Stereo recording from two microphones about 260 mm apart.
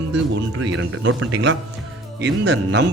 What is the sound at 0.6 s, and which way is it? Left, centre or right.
Speech, right.